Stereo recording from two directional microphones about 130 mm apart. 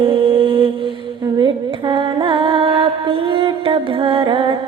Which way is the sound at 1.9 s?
40° right (ahead or behind).